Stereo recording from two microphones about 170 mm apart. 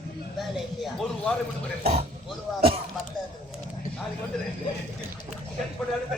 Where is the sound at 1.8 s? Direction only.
35° right (ahead or behind).